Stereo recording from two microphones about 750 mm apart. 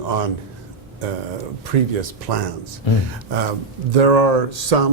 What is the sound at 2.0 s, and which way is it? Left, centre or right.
Speech, right.